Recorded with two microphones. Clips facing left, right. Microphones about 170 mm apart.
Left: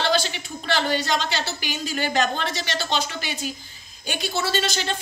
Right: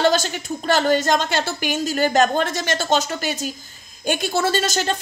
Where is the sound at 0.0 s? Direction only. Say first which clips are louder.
Right 5 dB; 45° right (ahead or behind).